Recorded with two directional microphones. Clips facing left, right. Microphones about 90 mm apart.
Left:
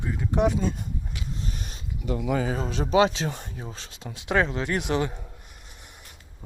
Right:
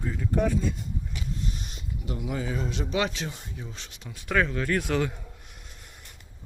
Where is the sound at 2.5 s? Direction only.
40° left (ahead or behind).